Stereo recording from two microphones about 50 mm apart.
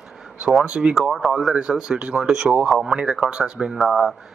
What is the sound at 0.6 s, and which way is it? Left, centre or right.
Speech, centre.